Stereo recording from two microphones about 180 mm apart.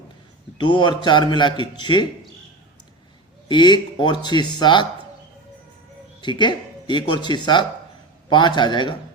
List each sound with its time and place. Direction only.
0.6 s a man's voice: 25° left (ahead or behind)
3.5 s a man's voice: 25° left (ahead or behind)
6.2 s a man's voice: 25° left (ahead or behind)